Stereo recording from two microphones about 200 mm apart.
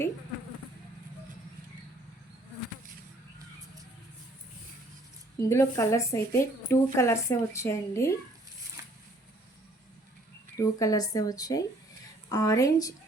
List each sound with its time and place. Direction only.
5.4 s a woman's voice: 15° left (ahead or behind)
8.8 s a sound: 15° right (ahead or behind)
10.6 s a woman's voice: 15° left (ahead or behind)